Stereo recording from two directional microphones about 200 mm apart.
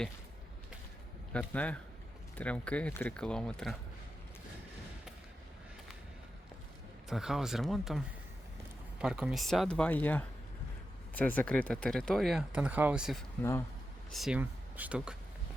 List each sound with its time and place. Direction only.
1.3 s speech: 5° left (ahead or behind)
7.1 s speech: centre (ahead or behind)
13.4 s speech: 5° left (ahead or behind)